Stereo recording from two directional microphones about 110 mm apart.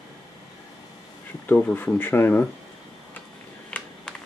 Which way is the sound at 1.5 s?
15° left (ahead or behind).